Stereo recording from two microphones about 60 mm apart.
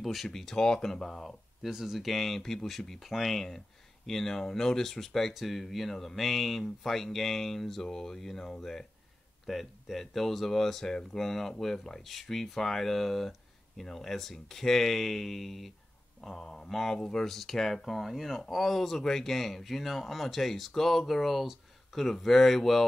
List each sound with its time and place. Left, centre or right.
0.0 s speech: centre